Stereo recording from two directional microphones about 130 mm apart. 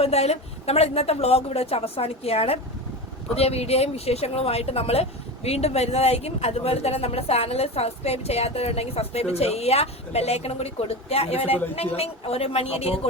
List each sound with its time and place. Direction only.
0.0 s a woman's voice: 55° left (ahead or behind)